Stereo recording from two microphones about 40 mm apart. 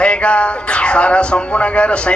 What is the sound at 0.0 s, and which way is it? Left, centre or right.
Music, left.